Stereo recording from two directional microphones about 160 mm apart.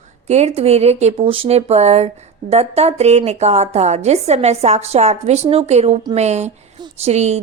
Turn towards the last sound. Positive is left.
turn(degrees=-45)  # may be behind; listen again after turning